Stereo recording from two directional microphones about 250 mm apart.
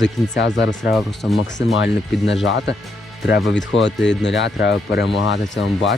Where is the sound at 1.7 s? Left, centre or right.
Left.